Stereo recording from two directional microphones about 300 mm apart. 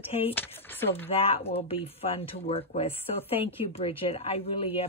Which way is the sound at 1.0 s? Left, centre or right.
Centre.